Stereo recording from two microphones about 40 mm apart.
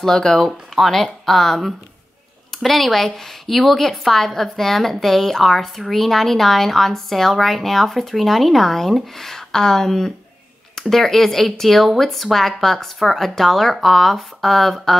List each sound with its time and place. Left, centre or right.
0.0 s a woman's voice: centre